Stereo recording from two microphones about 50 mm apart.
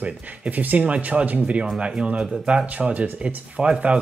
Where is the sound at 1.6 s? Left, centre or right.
Centre.